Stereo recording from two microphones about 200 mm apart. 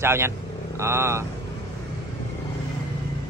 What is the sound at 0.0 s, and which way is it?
Speech, 10° right (ahead or behind).